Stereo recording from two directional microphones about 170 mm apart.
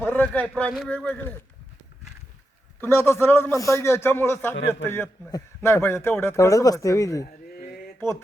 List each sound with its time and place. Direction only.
0.0 s a man's voice: 10° left (ahead or behind)
2.8 s a man's voice: 15° left (ahead or behind)